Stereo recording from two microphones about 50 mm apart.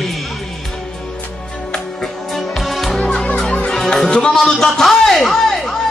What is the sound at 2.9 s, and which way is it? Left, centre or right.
Music, centre.